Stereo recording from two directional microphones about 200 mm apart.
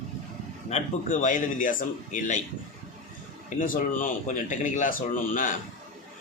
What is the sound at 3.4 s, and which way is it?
A man's voice, 40° left (ahead or behind).